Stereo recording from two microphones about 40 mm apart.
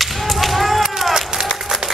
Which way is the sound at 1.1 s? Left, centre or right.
Centre.